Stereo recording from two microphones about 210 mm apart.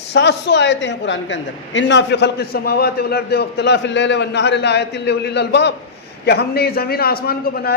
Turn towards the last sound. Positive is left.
turn(degrees=45)  # may be behind; listen again after turning